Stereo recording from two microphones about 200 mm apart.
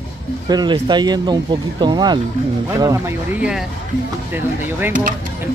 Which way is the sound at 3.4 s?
5° right (ahead or behind).